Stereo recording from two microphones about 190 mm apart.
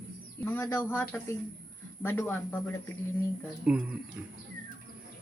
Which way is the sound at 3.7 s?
5° right (ahead or behind).